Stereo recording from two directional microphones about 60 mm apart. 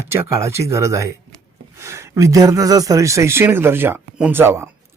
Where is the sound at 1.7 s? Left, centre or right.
Right.